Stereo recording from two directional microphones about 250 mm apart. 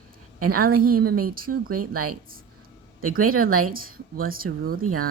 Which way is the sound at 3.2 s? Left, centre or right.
Right.